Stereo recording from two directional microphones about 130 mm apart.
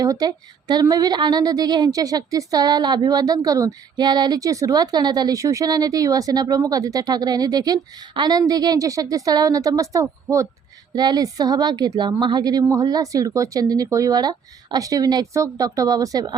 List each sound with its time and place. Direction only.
0.0 s a woman's voice: 30° right (ahead or behind)